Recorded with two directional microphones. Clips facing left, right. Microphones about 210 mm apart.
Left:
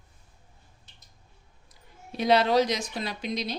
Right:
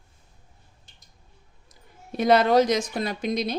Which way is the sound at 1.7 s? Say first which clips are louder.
Right 5 dB; 50° right (ahead or behind).